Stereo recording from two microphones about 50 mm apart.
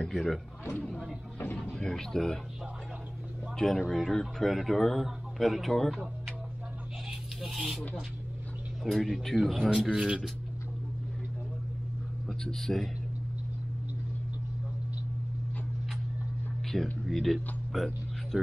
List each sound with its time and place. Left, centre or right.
0.0 s a man's voice: centre
3.5 s a man's voice: centre
7.1 s music: centre
8.8 s a man's voice: centre
9.8 s speech: centre
12.3 s speech: centre
16.7 s speech: centre